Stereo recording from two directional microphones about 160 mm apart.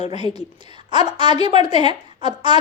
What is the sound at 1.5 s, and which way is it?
Speech, 40° left (ahead or behind).